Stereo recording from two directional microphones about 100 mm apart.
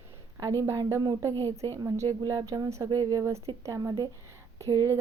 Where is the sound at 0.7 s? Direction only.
40° right (ahead or behind).